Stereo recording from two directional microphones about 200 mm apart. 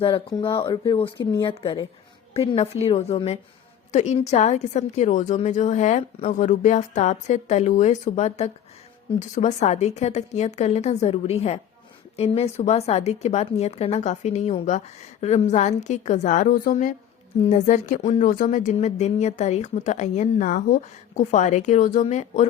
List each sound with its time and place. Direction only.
0.0 s a woman's voice: 25° left (ahead or behind)